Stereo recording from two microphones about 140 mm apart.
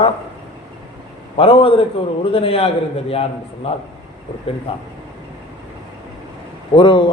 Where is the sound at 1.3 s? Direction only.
40° left (ahead or behind).